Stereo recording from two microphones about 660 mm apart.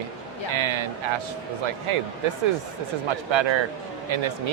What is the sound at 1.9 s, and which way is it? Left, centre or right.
Speech, right.